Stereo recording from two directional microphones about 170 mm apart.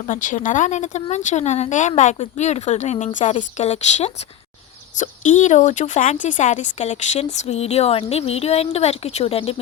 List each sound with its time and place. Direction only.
0.0 s speech: 50° left (ahead or behind)